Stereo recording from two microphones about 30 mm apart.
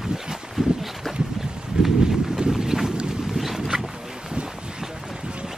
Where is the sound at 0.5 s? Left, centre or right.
Centre.